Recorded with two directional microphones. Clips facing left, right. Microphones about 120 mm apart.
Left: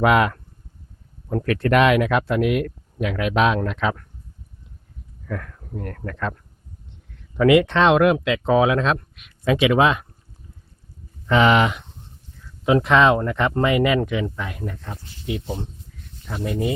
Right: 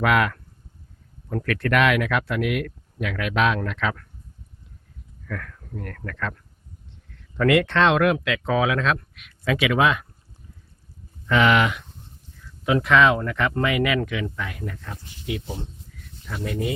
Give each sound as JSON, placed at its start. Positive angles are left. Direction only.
{"t": 0.0, "sound": "speech", "side_deg": 25}
{"t": 5.2, "sound": "speech", "side_deg": 20}
{"t": 11.3, "sound": "speech", "side_deg": 30}